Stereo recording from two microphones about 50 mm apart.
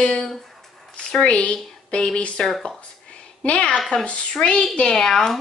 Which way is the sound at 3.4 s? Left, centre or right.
Centre.